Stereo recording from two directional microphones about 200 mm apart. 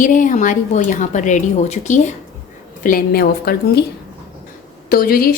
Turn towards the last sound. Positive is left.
turn(degrees=45)  # may be behind; listen again after turning